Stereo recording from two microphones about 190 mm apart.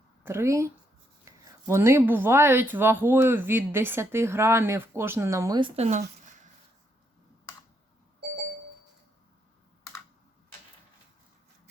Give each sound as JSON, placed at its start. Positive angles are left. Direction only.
{"t": 0.3, "sound": "speech", "side_deg": -15}
{"t": 5.7, "sound": "speech", "side_deg": -35}